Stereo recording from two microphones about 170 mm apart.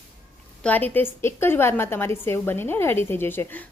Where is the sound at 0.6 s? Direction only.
10° left (ahead or behind).